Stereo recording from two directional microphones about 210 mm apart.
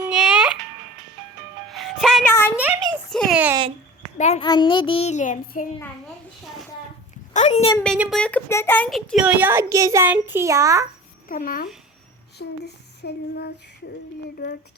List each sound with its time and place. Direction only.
0.1 s music: 5° right (ahead or behind)
1.7 s music: centre (ahead or behind)
2.2 s a sound: 10° left (ahead or behind)
2.6 s a sound: 5° right (ahead or behind)
4.2 s a child's voice: 30° left (ahead or behind)
4.4 s child singing: 20° left (ahead or behind); by 5.6 s 35° left (ahead or behind)
7.3 s a woman's voice: 30° left (ahead or behind)
7.9 s a child's voice: 5° right (ahead or behind)
8.2 s a child's voice: 5° left (ahead or behind); by 10.8 s 15° right (ahead or behind)
11.3 s child singing: 40° left (ahead or behind)